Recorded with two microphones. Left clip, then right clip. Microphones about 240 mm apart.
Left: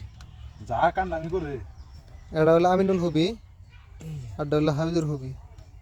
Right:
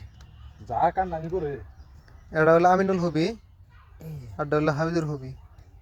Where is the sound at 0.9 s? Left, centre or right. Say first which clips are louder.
Even; centre.